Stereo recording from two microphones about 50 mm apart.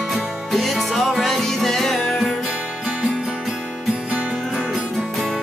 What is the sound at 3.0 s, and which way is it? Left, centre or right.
Music, centre.